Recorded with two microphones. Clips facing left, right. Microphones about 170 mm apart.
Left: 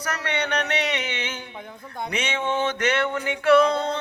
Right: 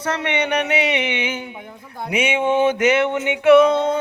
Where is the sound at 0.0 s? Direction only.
25° right (ahead or behind); by 3.0 s 5° right (ahead or behind).